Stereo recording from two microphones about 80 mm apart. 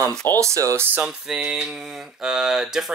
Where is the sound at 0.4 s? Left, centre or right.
Right.